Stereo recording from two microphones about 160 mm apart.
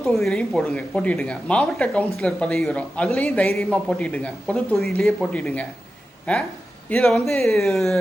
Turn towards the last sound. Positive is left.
turn(degrees=0)  # may be behind; listen again after turning